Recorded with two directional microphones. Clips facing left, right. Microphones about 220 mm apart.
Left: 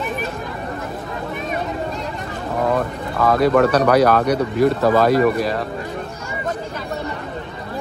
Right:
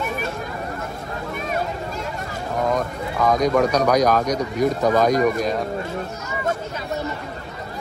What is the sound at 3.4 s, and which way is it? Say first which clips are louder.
Speech: left 5 dB; 5° left (ahead or behind).